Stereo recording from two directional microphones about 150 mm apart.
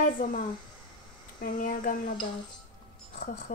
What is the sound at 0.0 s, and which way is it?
Speech, 70° left (ahead or behind).